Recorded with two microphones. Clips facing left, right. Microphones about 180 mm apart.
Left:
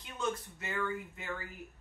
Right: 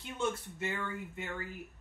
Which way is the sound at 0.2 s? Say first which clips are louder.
Right 2 dB; 25° right (ahead or behind).